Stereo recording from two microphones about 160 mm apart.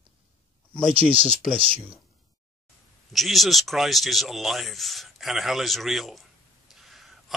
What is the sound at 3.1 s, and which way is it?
A man's voice, centre (ahead or behind).